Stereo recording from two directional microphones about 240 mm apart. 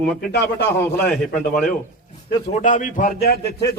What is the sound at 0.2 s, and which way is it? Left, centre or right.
Speech, left.